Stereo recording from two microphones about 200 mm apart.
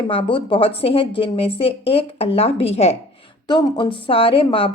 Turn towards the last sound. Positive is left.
turn(degrees=25)  # may be behind; listen again after turning